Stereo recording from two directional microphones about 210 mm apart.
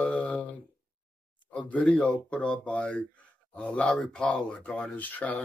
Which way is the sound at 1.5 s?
5° left (ahead or behind).